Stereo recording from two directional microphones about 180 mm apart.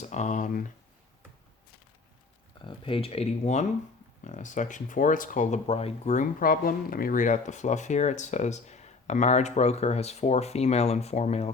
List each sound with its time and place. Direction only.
0.0 s speech: 40° left (ahead or behind)
2.6 s speech: 30° left (ahead or behind)